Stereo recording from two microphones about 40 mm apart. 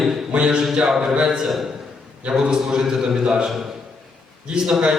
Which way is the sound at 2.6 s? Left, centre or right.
Centre.